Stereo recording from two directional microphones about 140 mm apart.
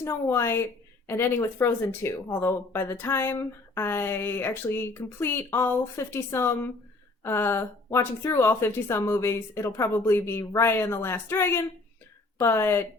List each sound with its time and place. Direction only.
0.0 s speech: 15° left (ahead or behind)